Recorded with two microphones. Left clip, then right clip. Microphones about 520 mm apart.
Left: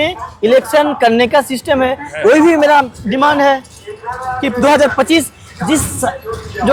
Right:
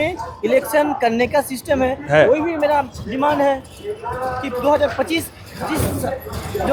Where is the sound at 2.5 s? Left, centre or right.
Left.